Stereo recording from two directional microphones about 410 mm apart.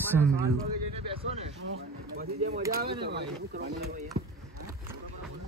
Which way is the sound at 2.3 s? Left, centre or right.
Centre.